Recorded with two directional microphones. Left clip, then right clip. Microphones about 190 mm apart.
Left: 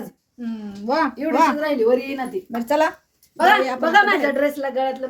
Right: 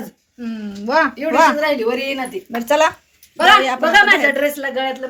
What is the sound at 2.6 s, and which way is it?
Speech, centre (ahead or behind).